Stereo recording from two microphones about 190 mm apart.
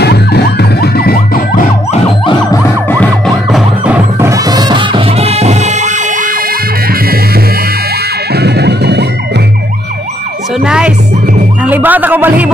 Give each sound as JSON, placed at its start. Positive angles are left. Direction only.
{"t": 0.0, "sound": "emergency vehicle", "side_deg": 60}
{"t": 2.5, "sound": "emergency vehicle", "side_deg": 10}
{"t": 3.4, "sound": "music", "side_deg": -5}
{"t": 8.3, "sound": "music", "side_deg": -60}
{"t": 10.6, "sound": "music", "side_deg": -5}